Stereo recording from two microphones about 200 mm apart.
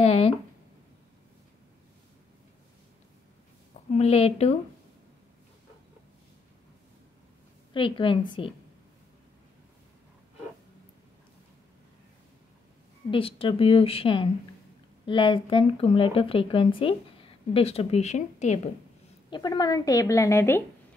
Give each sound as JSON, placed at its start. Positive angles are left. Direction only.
{"t": 0.0, "sound": "a sound", "side_deg": 30}
{"t": 3.9, "sound": "a woman's voice", "side_deg": 30}
{"t": 7.7, "sound": "a woman's voice", "side_deg": 25}
{"t": 13.1, "sound": "a woman's voice", "side_deg": 25}
{"t": 19.3, "sound": "a woman's voice", "side_deg": 20}